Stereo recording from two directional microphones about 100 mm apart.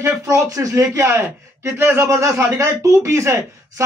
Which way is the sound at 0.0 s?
35° right (ahead or behind).